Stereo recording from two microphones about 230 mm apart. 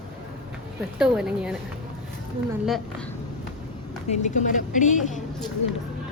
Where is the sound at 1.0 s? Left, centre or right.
Centre.